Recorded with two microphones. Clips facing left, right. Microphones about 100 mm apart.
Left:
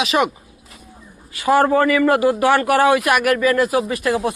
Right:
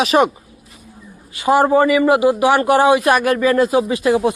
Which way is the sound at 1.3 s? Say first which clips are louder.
Right 2 dB; 20° right (ahead or behind).